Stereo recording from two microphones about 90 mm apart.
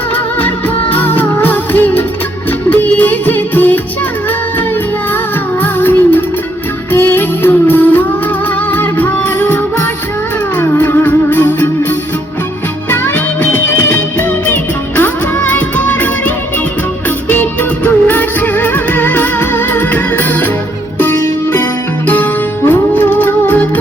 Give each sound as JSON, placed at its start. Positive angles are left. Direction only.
{"t": 0.3, "sound": "music of bollywood", "side_deg": 20}
{"t": 2.6, "sound": "music", "side_deg": 15}
{"t": 5.6, "sound": "music", "side_deg": 20}
{"t": 17.2, "sound": "music of bollywood", "side_deg": 20}
{"t": 21.0, "sound": "music", "side_deg": 20}